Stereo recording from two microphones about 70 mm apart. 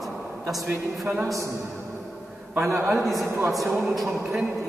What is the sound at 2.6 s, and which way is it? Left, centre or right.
Speech, right.